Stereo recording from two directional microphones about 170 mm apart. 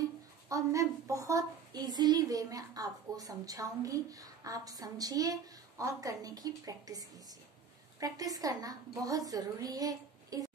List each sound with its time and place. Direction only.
0.5 s a woman's voice: 20° right (ahead or behind)